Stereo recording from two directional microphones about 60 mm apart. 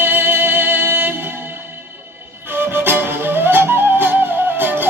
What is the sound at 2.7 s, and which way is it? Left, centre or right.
Music, right.